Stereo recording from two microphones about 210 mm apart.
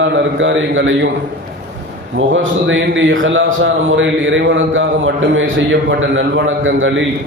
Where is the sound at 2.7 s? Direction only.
65° right (ahead or behind).